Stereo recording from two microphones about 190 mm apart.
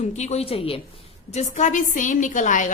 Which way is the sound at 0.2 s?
35° left (ahead or behind).